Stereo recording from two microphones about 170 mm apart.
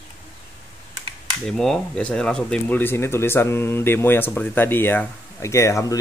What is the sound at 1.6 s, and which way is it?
Speech, 5° left (ahead or behind).